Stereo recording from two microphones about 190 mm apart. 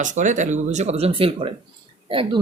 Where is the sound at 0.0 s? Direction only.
40° right (ahead or behind).